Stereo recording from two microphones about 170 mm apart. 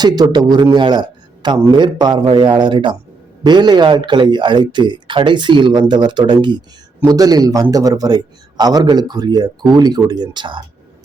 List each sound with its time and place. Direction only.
0.0 s a man's voice: 25° right (ahead or behind)